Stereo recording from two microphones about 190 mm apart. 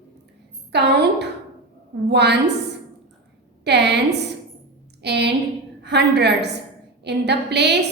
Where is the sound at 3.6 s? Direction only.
60° right (ahead or behind).